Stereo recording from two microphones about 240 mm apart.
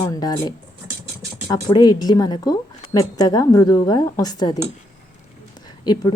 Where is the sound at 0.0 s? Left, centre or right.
Centre.